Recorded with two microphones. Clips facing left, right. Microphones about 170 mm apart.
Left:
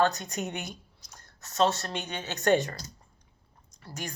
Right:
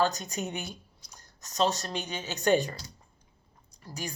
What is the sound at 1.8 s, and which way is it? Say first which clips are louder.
Speech: even; 10° right (ahead or behind).